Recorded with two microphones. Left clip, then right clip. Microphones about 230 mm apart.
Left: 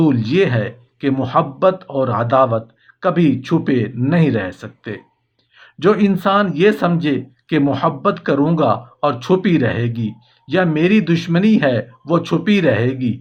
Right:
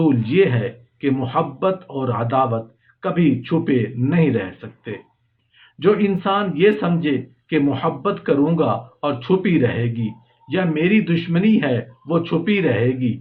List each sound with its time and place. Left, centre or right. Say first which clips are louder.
0.0 s speech: left 1 dB; left